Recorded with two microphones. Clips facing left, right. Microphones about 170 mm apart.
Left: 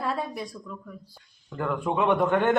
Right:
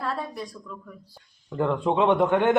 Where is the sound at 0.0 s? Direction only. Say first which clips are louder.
Left 1 dB; 10° left (ahead or behind).